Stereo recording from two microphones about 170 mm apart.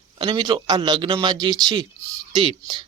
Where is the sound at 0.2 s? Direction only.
25° right (ahead or behind).